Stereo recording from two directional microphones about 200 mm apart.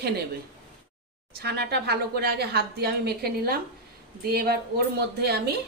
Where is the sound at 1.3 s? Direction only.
50° right (ahead or behind).